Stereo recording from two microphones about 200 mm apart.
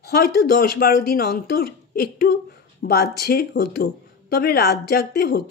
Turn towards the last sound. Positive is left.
turn(degrees=50)  # may be behind; listen again after turning